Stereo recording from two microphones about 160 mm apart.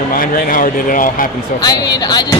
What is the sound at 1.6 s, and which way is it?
Speech, 25° left (ahead or behind).